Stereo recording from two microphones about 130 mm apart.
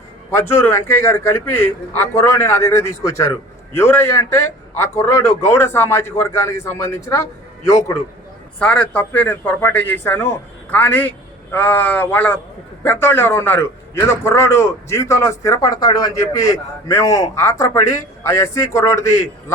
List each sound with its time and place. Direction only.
0.3 s a man's voice: 20° left (ahead or behind)
8.5 s a man's voice: 10° left (ahead or behind)